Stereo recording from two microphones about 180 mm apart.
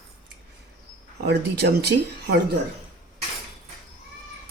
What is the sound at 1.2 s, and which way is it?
Speech, 65° right (ahead or behind).